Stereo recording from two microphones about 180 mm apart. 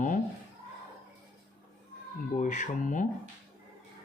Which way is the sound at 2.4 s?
45° left (ahead or behind).